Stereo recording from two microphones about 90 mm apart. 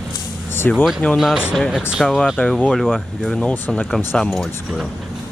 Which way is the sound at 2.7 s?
Centre (ahead or behind).